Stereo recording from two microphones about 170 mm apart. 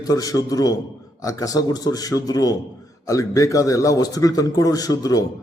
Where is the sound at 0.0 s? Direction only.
20° left (ahead or behind).